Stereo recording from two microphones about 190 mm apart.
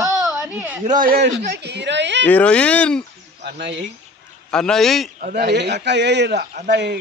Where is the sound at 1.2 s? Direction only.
65° right (ahead or behind).